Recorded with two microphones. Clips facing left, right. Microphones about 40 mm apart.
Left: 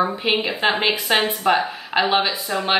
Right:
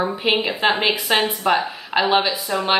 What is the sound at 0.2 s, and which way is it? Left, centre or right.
A woman's voice, centre.